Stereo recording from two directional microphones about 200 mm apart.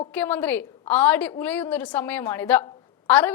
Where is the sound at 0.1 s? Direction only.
10° left (ahead or behind).